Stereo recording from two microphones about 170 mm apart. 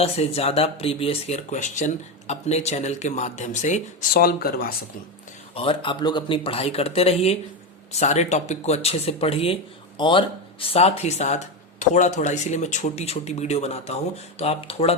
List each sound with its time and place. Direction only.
0.0 s speech: 35° left (ahead or behind)
4.2 s speech: 65° left (ahead or behind)
5.5 s speech: 30° left (ahead or behind)